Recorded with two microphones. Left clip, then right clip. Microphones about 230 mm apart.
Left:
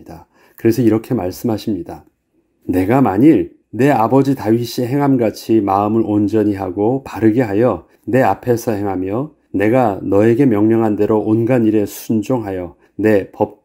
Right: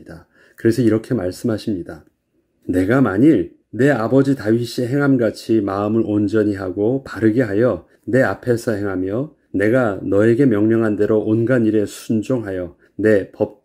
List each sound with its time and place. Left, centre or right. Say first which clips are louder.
0.0 s speech: left 3 dB; left
2.8 s speech: left 3 dB; left